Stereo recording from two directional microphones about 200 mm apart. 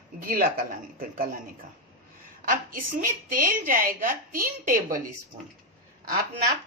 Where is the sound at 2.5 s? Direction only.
45° right (ahead or behind).